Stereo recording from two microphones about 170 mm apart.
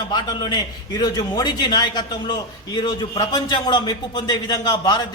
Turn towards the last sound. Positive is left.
turn(degrees=25)  # may be behind; listen again after turning